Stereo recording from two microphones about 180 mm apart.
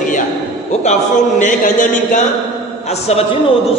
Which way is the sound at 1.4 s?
45° left (ahead or behind).